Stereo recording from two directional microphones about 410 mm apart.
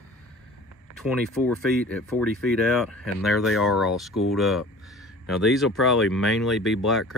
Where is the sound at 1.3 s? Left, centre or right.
Centre.